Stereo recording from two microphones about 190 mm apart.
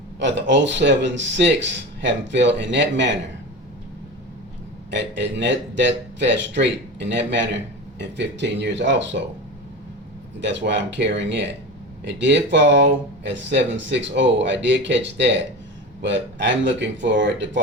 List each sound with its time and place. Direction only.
0.2 s speech: 70° right (ahead or behind)
4.9 s speech: 70° right (ahead or behind)
10.4 s speech: 65° right (ahead or behind)